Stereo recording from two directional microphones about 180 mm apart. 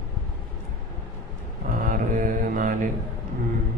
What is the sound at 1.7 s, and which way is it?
Speech, 45° right (ahead or behind).